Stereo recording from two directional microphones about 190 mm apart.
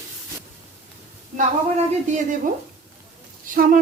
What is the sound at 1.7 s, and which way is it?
Speech, 40° right (ahead or behind).